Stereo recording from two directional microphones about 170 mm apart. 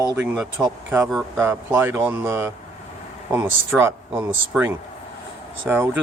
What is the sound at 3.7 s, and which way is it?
Speech, 15° right (ahead or behind).